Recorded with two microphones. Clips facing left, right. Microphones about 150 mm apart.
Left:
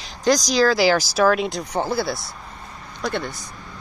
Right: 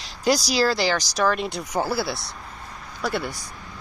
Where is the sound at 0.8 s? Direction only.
5° left (ahead or behind); by 3.4 s 10° right (ahead or behind).